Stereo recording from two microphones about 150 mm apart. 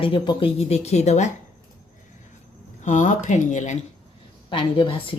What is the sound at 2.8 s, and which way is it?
Speech, 55° left (ahead or behind).